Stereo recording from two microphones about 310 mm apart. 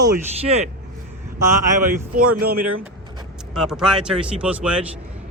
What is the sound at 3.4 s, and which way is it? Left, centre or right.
Speech, centre.